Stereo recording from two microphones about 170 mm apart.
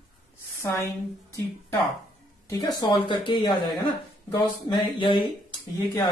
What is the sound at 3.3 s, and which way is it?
Speech, 30° left (ahead or behind).